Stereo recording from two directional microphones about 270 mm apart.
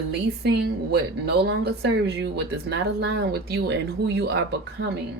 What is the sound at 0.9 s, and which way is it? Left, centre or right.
A woman's voice, right.